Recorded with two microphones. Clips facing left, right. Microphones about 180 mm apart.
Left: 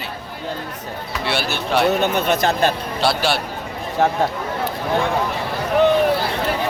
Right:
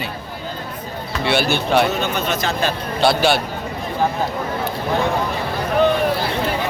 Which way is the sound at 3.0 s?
Centre (ahead or behind).